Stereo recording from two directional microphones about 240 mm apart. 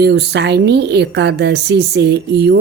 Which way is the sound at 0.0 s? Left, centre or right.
Right.